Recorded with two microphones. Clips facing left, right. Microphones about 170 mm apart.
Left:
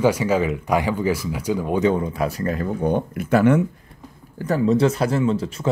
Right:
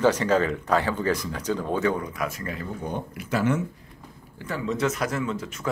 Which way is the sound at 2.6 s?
60° left (ahead or behind).